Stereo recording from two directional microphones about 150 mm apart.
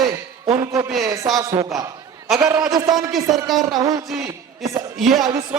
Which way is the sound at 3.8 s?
25° right (ahead or behind).